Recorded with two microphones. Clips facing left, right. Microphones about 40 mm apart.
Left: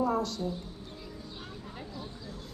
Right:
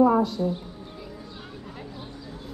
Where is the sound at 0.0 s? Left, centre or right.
Centre.